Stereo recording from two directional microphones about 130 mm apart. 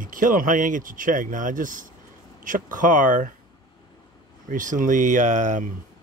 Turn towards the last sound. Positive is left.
turn(degrees=-70)  # may be behind; listen again after turning